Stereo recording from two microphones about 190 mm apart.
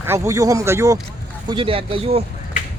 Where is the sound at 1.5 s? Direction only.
30° right (ahead or behind).